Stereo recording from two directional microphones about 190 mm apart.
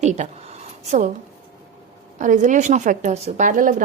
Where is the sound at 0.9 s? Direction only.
35° right (ahead or behind).